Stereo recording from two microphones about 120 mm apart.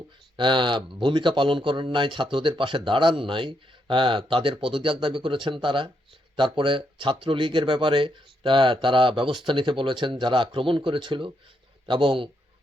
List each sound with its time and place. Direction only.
0.3 s speech: 40° right (ahead or behind)